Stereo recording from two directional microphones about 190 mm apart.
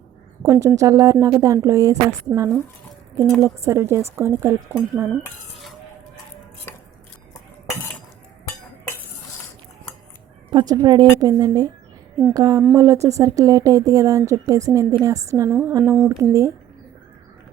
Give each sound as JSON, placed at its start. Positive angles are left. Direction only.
{"t": 0.4, "sound": "speech", "side_deg": -15}
{"t": 5.1, "sound": "cutlery", "side_deg": 0}
{"t": 6.7, "sound": "stir", "side_deg": 10}
{"t": 10.5, "sound": "speech", "side_deg": -20}